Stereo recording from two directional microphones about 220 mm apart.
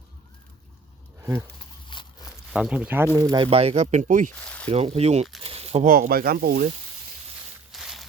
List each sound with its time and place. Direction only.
1.2 s speech: 10° right (ahead or behind)
1.5 s a sound: 20° left (ahead or behind)
2.5 s speech: 5° right (ahead or behind)
3.3 s speech: 25° right (ahead or behind)
4.4 s zipper: 5° left (ahead or behind)
4.7 s speech: 30° right (ahead or behind)
5.4 s a sound: 25° right (ahead or behind)
5.9 s speech: 45° right (ahead or behind)
7.7 s a sound: centre (ahead or behind)